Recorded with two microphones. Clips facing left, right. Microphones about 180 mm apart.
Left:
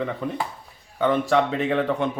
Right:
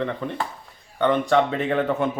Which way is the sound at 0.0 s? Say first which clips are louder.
Even; 5° left (ahead or behind).